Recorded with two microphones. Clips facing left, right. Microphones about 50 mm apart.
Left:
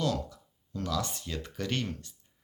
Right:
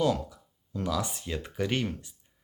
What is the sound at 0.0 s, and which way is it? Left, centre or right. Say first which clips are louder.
Speech: right 4 dB; centre.